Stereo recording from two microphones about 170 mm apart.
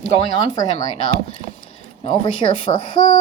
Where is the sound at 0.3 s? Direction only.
20° left (ahead or behind).